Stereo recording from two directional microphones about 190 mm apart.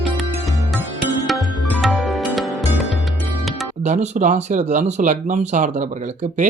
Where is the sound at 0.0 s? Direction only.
Centre (ahead or behind).